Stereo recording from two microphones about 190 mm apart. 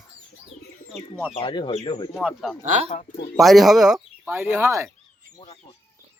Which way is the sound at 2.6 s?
40° right (ahead or behind).